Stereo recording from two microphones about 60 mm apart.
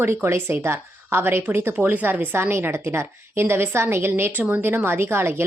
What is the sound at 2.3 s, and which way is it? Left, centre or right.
A woman's voice, right.